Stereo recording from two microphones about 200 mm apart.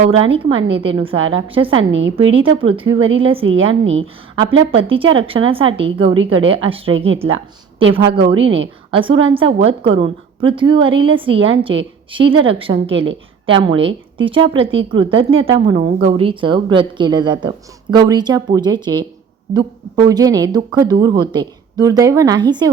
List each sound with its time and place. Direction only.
0.0 s a woman's voice: 25° right (ahead or behind)
1.9 s a woman's voice: 65° right (ahead or behind)
2.3 s a woman's voice: 25° right (ahead or behind)
7.3 s a woman's voice: 75° right (ahead or behind)
7.9 s a woman's voice: 25° right (ahead or behind)